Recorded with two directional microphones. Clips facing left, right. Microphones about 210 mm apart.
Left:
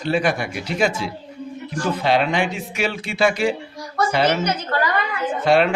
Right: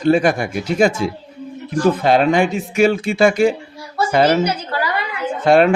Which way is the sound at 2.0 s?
45° right (ahead or behind).